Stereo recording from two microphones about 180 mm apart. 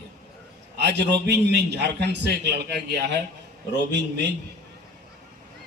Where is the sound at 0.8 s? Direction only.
70° right (ahead or behind).